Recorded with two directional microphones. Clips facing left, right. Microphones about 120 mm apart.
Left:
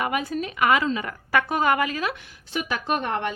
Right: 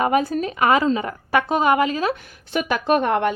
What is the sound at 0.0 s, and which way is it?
Speech, 35° right (ahead or behind).